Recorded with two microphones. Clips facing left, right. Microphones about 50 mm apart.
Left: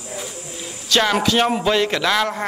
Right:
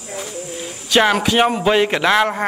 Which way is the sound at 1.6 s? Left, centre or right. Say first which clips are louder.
Right 3 dB; right.